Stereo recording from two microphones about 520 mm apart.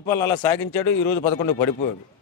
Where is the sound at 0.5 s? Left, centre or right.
Left.